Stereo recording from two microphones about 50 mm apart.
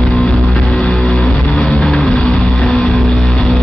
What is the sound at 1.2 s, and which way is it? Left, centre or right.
Vehicle, centre.